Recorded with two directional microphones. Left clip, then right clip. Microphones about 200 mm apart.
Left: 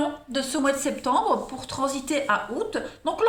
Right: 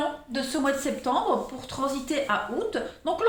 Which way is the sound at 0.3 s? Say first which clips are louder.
Left 2 dB; 40° left (ahead or behind).